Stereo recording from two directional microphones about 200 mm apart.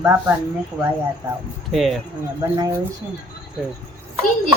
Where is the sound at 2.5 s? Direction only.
20° right (ahead or behind).